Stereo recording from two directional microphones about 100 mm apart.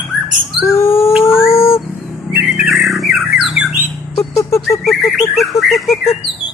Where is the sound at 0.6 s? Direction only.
25° left (ahead or behind).